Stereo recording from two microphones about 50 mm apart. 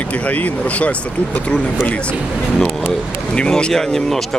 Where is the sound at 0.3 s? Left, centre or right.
Left.